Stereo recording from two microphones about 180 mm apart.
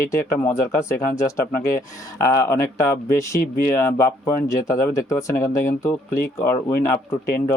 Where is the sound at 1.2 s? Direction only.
15° left (ahead or behind).